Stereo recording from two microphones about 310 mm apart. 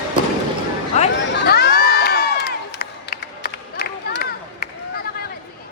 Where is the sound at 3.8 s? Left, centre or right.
Left.